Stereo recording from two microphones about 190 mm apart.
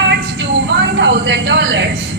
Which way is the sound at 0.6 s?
70° right (ahead or behind).